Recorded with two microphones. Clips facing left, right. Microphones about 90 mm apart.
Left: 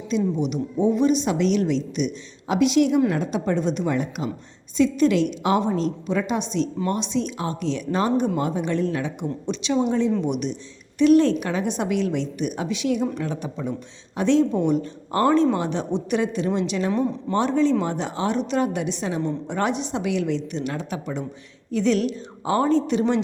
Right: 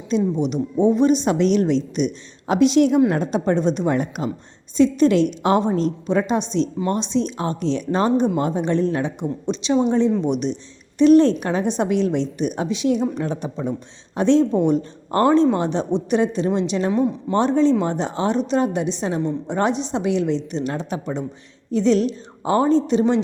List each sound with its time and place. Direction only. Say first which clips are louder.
0.1 s a woman's voice: right 3 dB; 40° right (ahead or behind)
15.2 s a woman's voice: right 3 dB; 20° right (ahead or behind)
15.5 s a woman's voice: right 4 dB; 30° right (ahead or behind)
16.9 s speech: right 3 dB; 10° right (ahead or behind)
17.3 s a woman's voice: right 3 dB; 30° right (ahead or behind)